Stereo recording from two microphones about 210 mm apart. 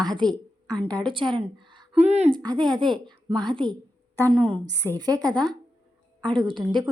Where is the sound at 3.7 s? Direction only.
10° left (ahead or behind).